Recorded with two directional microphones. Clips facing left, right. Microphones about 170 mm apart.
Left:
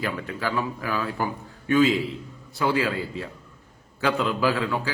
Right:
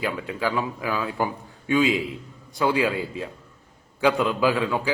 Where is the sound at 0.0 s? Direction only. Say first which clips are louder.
Right 2 dB; 15° right (ahead or behind).